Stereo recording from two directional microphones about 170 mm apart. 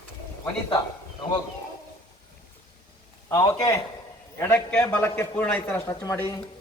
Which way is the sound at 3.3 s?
20° left (ahead or behind).